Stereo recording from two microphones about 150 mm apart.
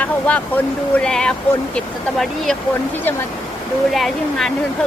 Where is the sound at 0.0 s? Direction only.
10° left (ahead or behind).